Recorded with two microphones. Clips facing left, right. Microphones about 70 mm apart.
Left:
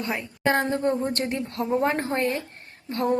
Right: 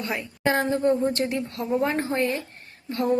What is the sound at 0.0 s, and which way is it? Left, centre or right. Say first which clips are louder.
Speech: even; left.